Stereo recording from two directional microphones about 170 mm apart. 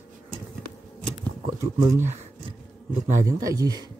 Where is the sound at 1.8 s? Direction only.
15° right (ahead or behind).